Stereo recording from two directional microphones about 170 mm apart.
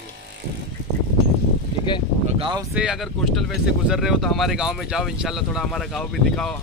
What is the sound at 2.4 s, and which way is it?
Speech, 25° right (ahead or behind).